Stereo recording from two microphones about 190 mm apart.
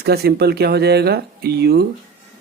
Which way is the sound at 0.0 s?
55° right (ahead or behind).